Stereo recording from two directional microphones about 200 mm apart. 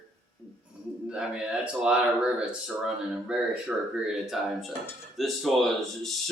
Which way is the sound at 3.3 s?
5° right (ahead or behind).